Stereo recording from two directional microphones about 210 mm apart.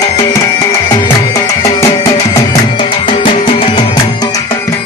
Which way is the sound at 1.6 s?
15° left (ahead or behind).